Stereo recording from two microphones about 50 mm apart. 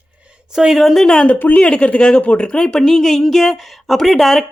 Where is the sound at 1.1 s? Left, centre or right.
Centre.